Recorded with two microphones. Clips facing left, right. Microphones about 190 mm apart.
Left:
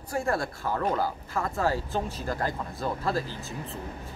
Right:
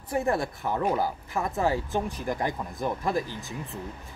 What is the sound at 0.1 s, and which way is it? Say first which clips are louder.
A man's voice: right 2 dB; 20° right (ahead or behind).